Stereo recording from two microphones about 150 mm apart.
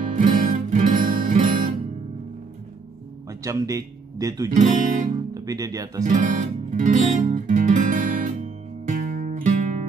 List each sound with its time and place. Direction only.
0.1 s music: 65° right (ahead or behind)
3.3 s a man's voice: 20° right (ahead or behind)
4.6 s guitar: 60° right (ahead or behind)
5.3 s speech: 25° right (ahead or behind)
6.0 s music: 55° right (ahead or behind)